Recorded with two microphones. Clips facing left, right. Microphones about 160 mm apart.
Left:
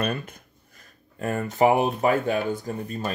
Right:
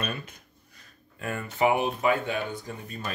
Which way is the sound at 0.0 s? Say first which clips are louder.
Left 6 dB; 50° left (ahead or behind).